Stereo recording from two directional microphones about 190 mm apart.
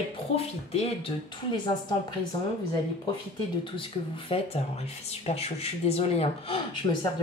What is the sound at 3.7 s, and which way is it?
Speech, 30° left (ahead or behind).